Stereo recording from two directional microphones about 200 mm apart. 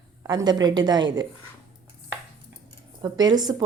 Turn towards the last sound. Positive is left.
turn(degrees=-20)  # may be behind; listen again after turning